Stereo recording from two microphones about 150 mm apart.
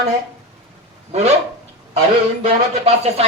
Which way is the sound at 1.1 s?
45° right (ahead or behind).